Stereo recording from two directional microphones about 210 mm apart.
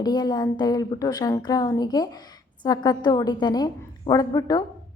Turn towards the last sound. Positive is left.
turn(degrees=20)  # may be behind; listen again after turning